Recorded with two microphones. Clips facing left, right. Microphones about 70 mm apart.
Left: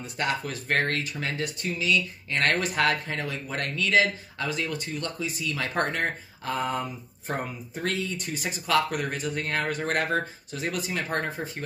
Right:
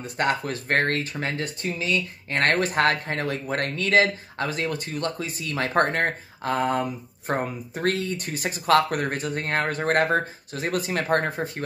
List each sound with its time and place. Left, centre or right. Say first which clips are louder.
0.0 s speech: right 4 dB; right